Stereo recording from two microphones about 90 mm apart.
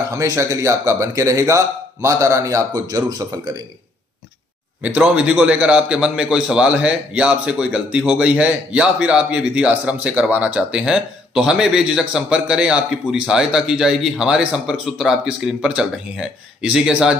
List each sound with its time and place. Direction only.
0.1 s speech: 35° right (ahead or behind)
4.8 s a man's voice: 15° right (ahead or behind)